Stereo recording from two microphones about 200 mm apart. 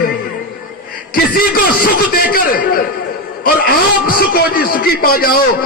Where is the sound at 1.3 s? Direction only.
45° left (ahead or behind).